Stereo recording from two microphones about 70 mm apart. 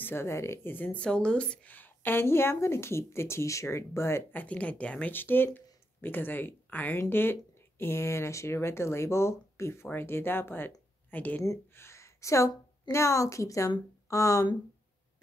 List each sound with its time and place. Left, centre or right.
0.0 s a woman's voice: left
0.7 s a woman's voice: left
4.3 s speech: left
5.1 s a woman's voice: left
11.7 s a woman's voice: left